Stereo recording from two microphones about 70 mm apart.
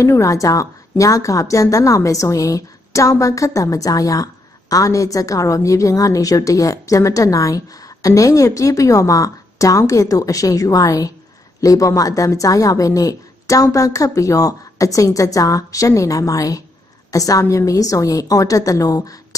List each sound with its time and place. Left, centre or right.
0.0 s a woman's voice: left